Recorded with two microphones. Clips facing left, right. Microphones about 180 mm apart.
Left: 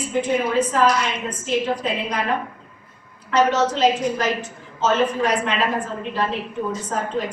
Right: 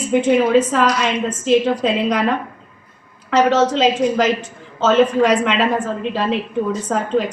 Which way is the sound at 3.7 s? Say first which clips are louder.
Right 3 dB; 90° right.